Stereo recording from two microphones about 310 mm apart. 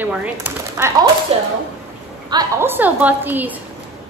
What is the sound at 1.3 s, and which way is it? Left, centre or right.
A woman's voice, centre.